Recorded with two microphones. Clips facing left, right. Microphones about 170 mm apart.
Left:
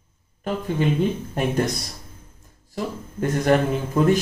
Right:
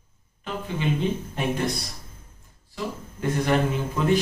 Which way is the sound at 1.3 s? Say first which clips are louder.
Left 6 dB; 45° left (ahead or behind).